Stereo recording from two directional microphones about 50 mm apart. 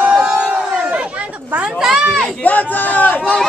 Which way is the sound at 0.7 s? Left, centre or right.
Right.